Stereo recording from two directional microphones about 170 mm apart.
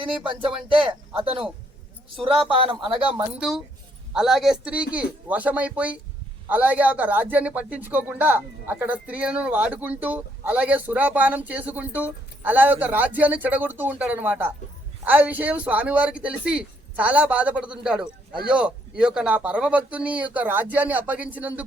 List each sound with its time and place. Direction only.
0.7 s speech: 30° right (ahead or behind)
2.5 s speech: 30° right (ahead or behind)
4.1 s a man's voice: 5° right (ahead or behind)